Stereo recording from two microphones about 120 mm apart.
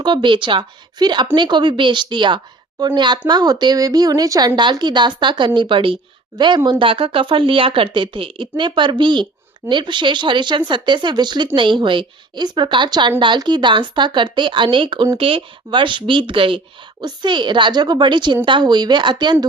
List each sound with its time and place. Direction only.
0.0 s speech: 40° right (ahead or behind)